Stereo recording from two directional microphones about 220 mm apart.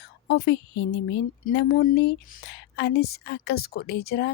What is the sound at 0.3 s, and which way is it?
A woman's voice, 50° left (ahead or behind).